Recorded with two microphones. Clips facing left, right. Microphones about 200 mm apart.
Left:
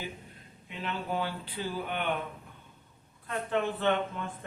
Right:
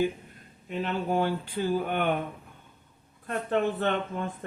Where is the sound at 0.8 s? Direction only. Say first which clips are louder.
Right 6 dB; 45° right (ahead or behind).